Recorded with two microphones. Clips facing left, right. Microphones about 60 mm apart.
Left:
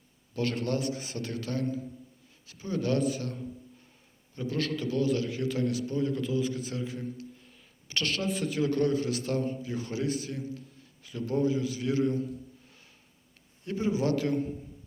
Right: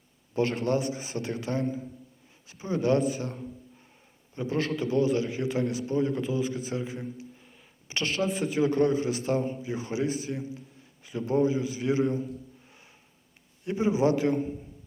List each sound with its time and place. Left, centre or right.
0.4 s a man's voice: right
0.8 s a man's voice: centre